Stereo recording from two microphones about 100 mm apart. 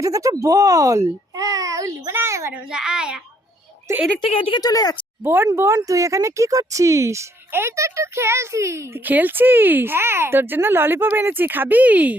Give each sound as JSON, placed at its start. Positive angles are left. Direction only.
{"t": 0.0, "sound": "speech", "side_deg": -35}
{"t": 2.6, "sound": "a child's voice", "side_deg": -10}
{"t": 4.2, "sound": "a woman's voice", "side_deg": 60}
{"t": 4.6, "sound": "speech", "side_deg": 40}
{"t": 5.2, "sound": "speech", "side_deg": -20}
{"t": 5.9, "sound": "speech", "side_deg": -35}
{"t": 9.0, "sound": "speech", "side_deg": -20}